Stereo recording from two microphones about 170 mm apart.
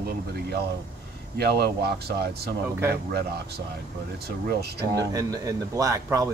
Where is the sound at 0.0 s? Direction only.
70° right (ahead or behind).